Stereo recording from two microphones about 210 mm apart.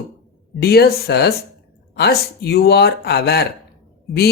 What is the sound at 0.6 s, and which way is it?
Speech, 50° left (ahead or behind).